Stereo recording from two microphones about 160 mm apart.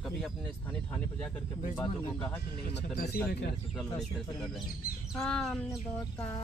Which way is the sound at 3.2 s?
75° left (ahead or behind).